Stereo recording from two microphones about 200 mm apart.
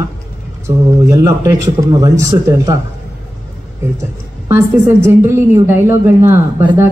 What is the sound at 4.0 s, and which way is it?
A man's voice, 10° right (ahead or behind).